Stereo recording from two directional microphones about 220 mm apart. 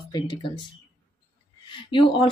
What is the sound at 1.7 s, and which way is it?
Speech, 20° left (ahead or behind).